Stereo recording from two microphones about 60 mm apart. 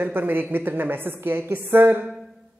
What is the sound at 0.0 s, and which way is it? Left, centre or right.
Speech, right.